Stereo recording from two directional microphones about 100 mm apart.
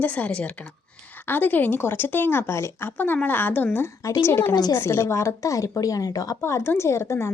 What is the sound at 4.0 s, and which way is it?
Speech, 35° left (ahead or behind).